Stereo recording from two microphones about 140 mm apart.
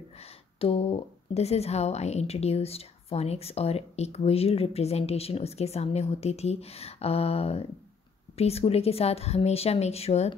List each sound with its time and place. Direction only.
0.2 s a woman's voice: 45° left (ahead or behind)